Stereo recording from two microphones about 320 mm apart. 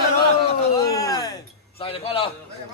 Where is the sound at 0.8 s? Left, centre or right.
Centre.